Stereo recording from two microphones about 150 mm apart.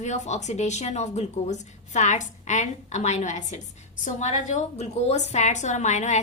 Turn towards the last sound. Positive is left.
turn(degrees=55)  # may be behind; listen again after turning